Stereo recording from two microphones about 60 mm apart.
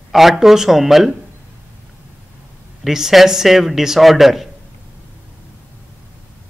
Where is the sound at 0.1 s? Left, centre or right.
Centre.